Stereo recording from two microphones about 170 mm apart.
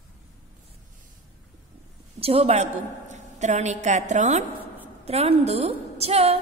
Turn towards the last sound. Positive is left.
turn(degrees=-35)  # may be behind; listen again after turning